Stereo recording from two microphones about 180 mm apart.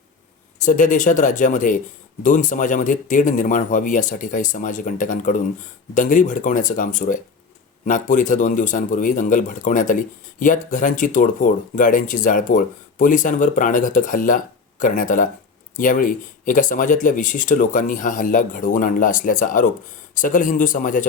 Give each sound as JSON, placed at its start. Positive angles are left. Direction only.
{"t": 0.6, "sound": "speech", "side_deg": 45}